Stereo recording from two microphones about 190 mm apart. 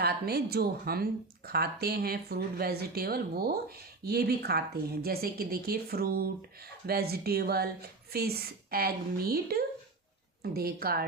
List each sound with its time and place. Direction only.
0.0 s a woman's voice: 55° right (ahead or behind)